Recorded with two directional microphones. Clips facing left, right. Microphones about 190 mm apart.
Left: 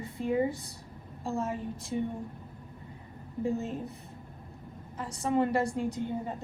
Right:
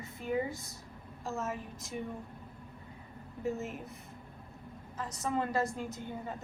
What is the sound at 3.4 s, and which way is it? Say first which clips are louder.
Speech: left 5 dB; 35° left (ahead or behind).